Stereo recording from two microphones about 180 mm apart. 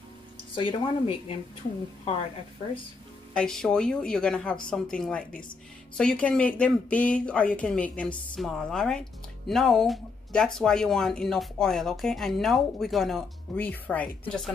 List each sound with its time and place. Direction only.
0.6 s speech: 30° left (ahead or behind)
3.3 s speech: 5° left (ahead or behind)